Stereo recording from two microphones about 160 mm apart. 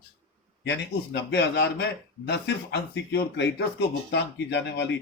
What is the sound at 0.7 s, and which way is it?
Speech, 90° left.